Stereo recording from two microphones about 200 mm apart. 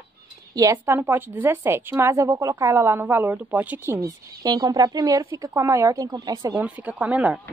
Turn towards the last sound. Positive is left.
turn(degrees=-5)  # may be behind; listen again after turning